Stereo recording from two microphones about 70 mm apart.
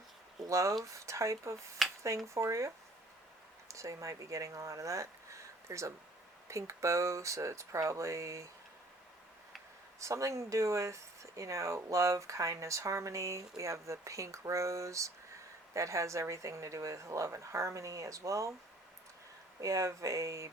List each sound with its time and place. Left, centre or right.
0.4 s speech: right
10.0 s speech: right
19.6 s speech: right